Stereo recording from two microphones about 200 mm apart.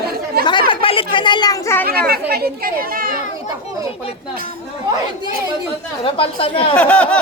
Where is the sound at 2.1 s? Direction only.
50° right (ahead or behind).